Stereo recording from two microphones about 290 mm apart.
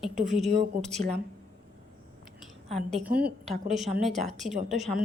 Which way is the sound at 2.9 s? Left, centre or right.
Centre.